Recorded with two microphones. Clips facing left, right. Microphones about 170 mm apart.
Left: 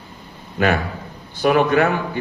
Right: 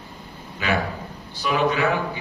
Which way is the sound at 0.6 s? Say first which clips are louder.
Left 5 dB; 55° left (ahead or behind).